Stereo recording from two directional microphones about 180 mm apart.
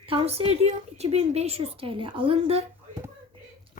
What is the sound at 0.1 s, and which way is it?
A woman's voice, 30° right (ahead or behind).